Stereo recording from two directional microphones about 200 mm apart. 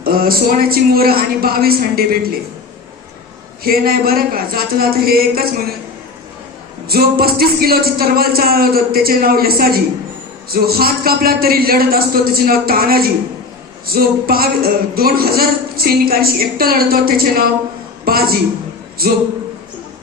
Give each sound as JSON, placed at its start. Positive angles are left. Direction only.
{"t": 0.0, "sound": "speech", "side_deg": -45}
{"t": 3.6, "sound": "speech", "side_deg": -50}
{"t": 6.8, "sound": "a man's voice", "side_deg": -50}